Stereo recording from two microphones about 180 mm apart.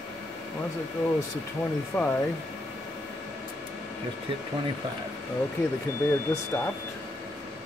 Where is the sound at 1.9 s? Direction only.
5° left (ahead or behind).